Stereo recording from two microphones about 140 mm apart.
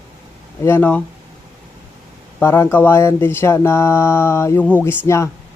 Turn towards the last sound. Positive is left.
turn(degrees=15)  # may be behind; listen again after turning